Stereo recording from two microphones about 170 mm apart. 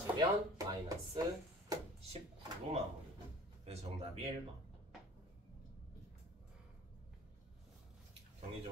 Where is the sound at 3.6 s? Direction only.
35° right (ahead or behind).